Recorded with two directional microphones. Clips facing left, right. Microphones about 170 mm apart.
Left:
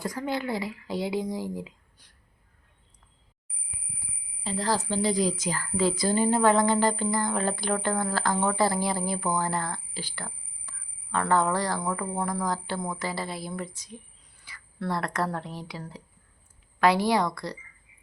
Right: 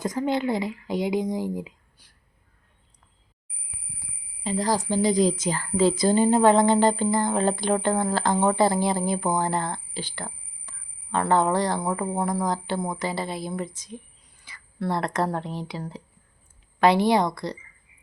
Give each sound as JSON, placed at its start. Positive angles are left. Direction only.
{"t": 0.0, "sound": "a woman's voice", "side_deg": -20}
{"t": 4.4, "sound": "a woman's voice", "side_deg": -15}